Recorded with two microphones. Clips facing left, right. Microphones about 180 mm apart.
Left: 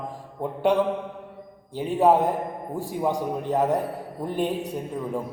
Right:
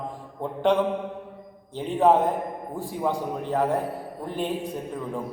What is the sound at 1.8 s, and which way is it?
Speech, 10° left (ahead or behind).